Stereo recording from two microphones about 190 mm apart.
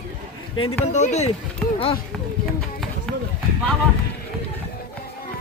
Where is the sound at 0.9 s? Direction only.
35° left (ahead or behind).